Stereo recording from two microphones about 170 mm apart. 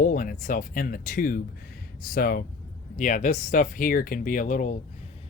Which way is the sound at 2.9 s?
45° left (ahead or behind).